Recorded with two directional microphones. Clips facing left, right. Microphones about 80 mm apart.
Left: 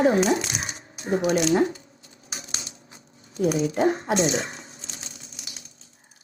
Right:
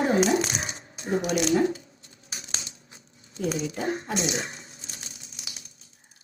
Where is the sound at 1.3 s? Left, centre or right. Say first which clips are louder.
Left 1 dB; left.